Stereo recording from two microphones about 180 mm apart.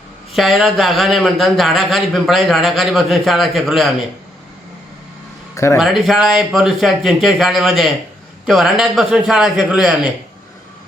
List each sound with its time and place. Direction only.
0.3 s a man's voice: centre (ahead or behind)
5.7 s a man's voice: centre (ahead or behind)